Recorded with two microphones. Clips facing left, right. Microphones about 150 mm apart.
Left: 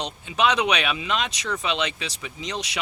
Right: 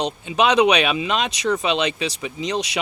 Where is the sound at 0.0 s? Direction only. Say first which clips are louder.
Right 4 dB; 20° right (ahead or behind).